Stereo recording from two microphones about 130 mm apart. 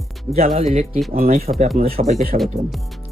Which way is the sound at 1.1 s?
90° right.